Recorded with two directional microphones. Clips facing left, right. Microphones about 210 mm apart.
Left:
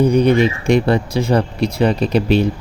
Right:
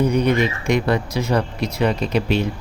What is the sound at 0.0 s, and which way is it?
Speech, 30° left (ahead or behind).